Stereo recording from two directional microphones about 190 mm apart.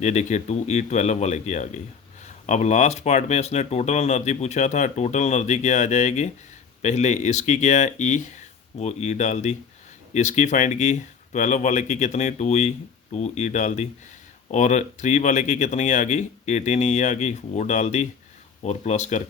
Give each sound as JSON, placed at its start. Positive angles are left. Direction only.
{"t": 0.0, "sound": "speech", "side_deg": 40}